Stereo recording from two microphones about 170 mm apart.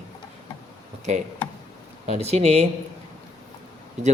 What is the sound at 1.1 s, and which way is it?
A man's voice, 45° right (ahead or behind).